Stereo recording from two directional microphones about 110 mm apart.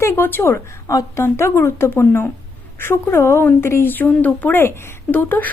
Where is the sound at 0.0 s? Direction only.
20° left (ahead or behind).